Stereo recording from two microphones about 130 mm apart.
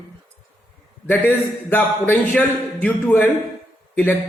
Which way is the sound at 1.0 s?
15° left (ahead or behind).